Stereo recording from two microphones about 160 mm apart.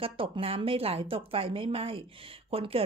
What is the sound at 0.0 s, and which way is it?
Speech, 35° right (ahead or behind).